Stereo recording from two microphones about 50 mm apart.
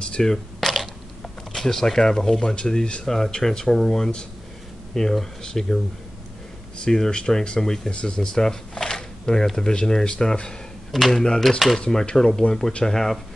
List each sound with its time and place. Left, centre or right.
0.0 s speech: centre
0.6 s a sound: centre
1.5 s speech: centre
6.8 s speech: centre
10.9 s speech: centre